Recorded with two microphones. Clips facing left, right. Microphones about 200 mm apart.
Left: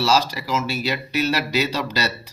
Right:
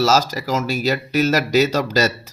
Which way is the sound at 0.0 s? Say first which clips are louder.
Right 3 dB; 45° right (ahead or behind).